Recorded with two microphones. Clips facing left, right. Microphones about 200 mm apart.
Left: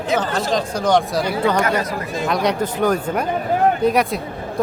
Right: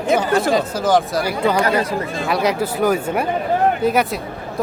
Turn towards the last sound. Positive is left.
turn(degrees=0)  # may be behind; listen again after turning